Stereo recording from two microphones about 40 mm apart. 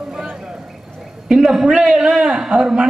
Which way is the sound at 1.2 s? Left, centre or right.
Centre.